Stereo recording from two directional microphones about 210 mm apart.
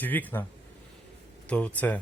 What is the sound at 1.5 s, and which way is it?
Speech, 5° left (ahead or behind).